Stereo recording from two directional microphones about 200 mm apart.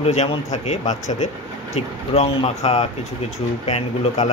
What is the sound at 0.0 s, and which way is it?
Speech, 35° left (ahead or behind).